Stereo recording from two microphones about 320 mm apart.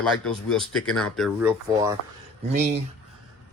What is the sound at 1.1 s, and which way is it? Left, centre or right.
Speech, centre.